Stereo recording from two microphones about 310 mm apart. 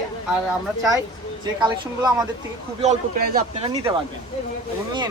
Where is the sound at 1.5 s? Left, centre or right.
Centre.